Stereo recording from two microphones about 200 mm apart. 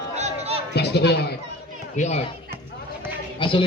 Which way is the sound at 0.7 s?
55° left (ahead or behind).